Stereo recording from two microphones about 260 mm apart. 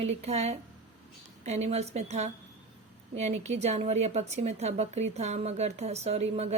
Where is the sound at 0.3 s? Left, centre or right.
Right.